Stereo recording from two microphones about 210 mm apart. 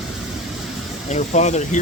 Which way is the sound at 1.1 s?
35° left (ahead or behind).